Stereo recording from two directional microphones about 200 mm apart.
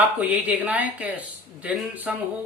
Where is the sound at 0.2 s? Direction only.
10° right (ahead or behind).